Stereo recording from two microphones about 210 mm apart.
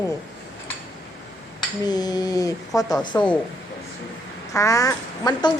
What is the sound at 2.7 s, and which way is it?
Speech, 15° left (ahead or behind).